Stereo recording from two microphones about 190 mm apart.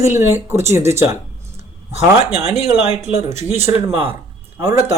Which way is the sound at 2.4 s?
35° left (ahead or behind).